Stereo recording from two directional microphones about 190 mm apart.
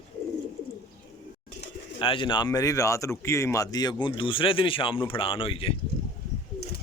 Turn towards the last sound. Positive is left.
turn(degrees=30)  # may be behind; listen again after turning